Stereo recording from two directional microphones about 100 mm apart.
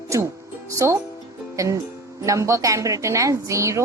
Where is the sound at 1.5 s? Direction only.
35° right (ahead or behind).